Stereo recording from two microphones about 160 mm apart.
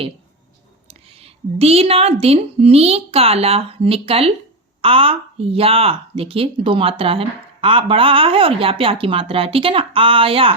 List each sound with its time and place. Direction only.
0.9 s a woman's voice: 40° right (ahead or behind)